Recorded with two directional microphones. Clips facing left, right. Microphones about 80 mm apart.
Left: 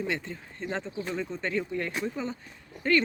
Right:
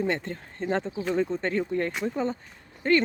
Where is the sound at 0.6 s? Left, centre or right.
Right.